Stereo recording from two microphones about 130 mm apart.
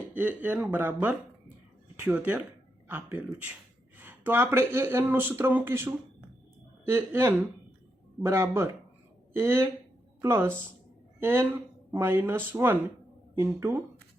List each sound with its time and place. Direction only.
0.1 s speech: 15° right (ahead or behind)